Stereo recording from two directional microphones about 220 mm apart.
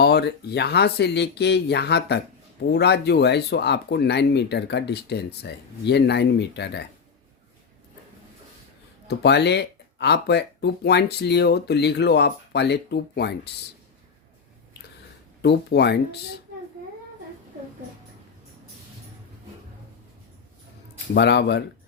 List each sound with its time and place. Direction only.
0.0 s speech: 50° left (ahead or behind)
9.0 s speech: 50° left (ahead or behind)
15.4 s speech: 50° left (ahead or behind)
21.1 s speech: 50° left (ahead or behind)